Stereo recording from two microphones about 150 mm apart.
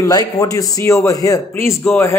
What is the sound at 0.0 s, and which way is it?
A man's voice, 25° left (ahead or behind).